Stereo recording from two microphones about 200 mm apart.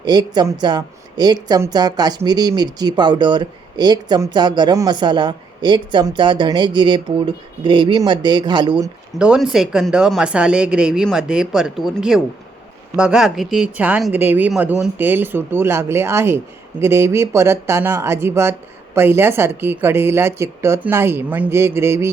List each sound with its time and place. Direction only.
0.0 s a woman's voice: 20° right (ahead or behind)
9.1 s a woman's voice: 5° right (ahead or behind)